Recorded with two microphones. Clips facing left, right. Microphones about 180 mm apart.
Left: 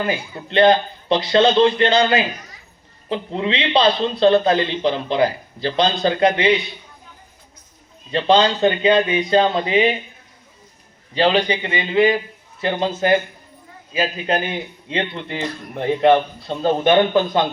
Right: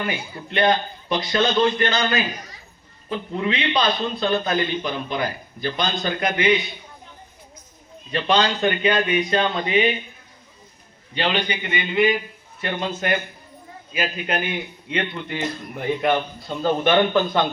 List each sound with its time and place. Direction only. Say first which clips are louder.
0.0 s a man's voice: left 4 dB; 30° left (ahead or behind)
8.1 s a man's voice: left 5 dB; 25° left (ahead or behind)
11.1 s a man's voice: left 7 dB; 35° left (ahead or behind)